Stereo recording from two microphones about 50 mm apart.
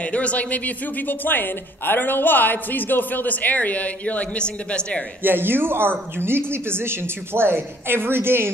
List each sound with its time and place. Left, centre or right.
0.0 s speech: left
5.2 s speech: right